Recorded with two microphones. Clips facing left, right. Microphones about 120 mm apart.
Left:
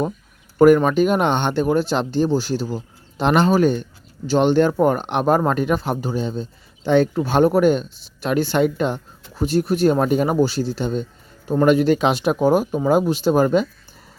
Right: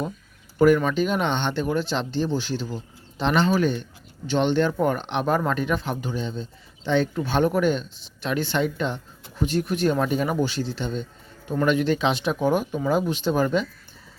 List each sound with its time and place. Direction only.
0.6 s speech: 45° left (ahead or behind)